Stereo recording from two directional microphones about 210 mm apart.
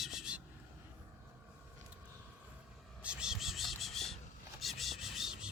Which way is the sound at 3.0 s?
5° right (ahead or behind).